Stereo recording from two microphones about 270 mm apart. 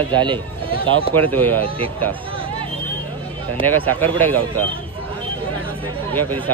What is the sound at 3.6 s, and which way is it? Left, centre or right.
Speech, right.